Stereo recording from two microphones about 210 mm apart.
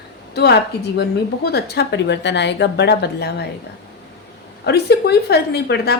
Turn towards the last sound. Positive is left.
turn(degrees=50)  # may be behind; listen again after turning